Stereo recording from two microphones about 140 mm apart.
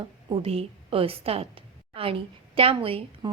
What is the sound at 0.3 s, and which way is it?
A woman's voice, 40° right (ahead or behind).